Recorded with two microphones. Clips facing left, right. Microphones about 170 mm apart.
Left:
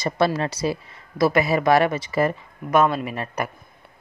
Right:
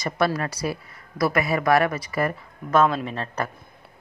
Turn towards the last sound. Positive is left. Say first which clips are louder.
# left 1 dB
turn(degrees=10)  # may be behind; listen again after turning